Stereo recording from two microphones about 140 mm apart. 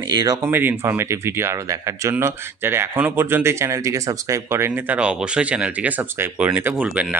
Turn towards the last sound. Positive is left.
turn(degrees=-10)  # may be behind; listen again after turning